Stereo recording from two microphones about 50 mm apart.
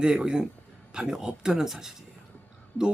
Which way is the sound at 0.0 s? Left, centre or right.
Centre.